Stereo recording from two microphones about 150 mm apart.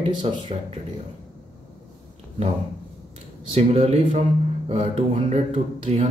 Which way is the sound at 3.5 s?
45° right (ahead or behind).